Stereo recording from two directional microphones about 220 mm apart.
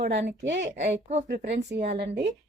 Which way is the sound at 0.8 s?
30° right (ahead or behind).